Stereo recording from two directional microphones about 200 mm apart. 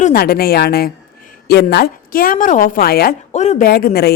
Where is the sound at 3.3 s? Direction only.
35° left (ahead or behind); by 4.1 s 50° left (ahead or behind).